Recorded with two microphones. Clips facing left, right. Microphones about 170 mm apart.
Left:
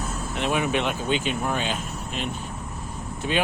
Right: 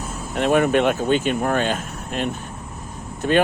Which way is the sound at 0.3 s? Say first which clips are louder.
Right 8 dB; 50° right (ahead or behind).